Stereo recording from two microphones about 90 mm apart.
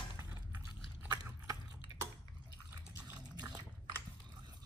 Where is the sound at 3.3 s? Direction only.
50° right (ahead or behind).